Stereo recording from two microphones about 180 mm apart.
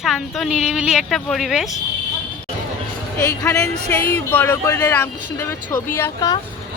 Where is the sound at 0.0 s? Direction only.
Centre (ahead or behind).